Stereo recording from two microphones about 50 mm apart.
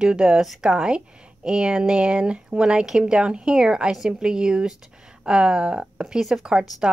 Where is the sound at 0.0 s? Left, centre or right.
Centre.